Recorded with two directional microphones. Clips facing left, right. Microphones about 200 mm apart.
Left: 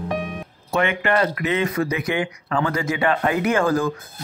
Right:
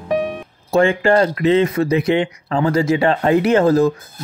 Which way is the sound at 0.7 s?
30° right (ahead or behind).